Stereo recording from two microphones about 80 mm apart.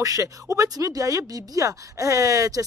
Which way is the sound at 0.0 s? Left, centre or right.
Right.